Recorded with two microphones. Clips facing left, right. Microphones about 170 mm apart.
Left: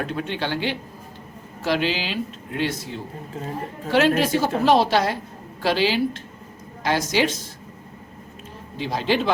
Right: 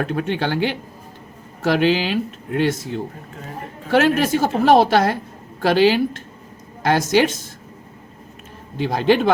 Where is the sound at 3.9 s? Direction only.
50° right (ahead or behind).